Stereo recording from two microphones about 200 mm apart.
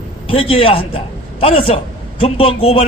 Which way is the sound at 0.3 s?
25° left (ahead or behind).